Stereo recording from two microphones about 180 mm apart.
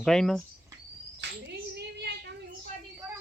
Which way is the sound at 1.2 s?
70° right (ahead or behind).